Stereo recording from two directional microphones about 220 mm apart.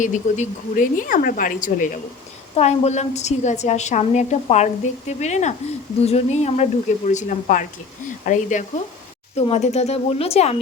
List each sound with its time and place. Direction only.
0.0 s a woman's voice: 35° left (ahead or behind)